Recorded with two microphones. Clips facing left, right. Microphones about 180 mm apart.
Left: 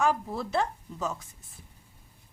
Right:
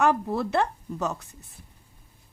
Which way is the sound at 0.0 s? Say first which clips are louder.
Right 4 dB; 65° right (ahead or behind).